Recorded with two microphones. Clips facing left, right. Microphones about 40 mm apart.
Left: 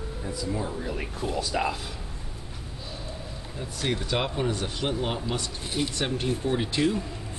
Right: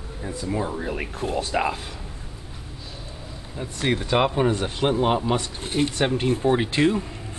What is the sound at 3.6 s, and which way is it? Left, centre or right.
Speech, right.